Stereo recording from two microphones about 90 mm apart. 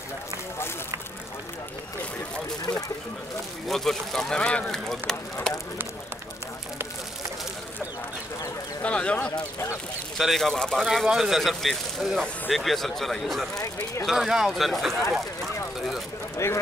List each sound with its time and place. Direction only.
3.6 s speech: 5° left (ahead or behind)
8.8 s a sound: 15° left (ahead or behind)
10.1 s speech: centre (ahead or behind)
10.9 s speech: 5° right (ahead or behind)
15.1 s a sound: 5° right (ahead or behind)
16.4 s speech: 30° left (ahead or behind)